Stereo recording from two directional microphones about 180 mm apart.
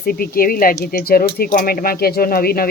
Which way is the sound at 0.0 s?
55° left (ahead or behind).